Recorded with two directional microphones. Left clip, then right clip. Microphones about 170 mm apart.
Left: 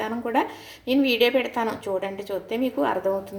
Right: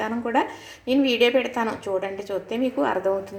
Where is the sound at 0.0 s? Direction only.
Centre (ahead or behind).